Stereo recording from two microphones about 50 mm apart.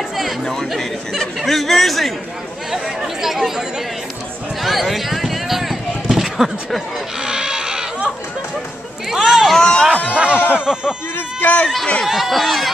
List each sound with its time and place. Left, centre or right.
0.7 s speech: centre
4.6 s a sound: centre
7.2 s goat: centre
9.1 s a sound: centre
9.6 s speech: centre
10.1 s a sound: right
10.5 s speech: centre
11.4 s speech: left
12.1 s speech: centre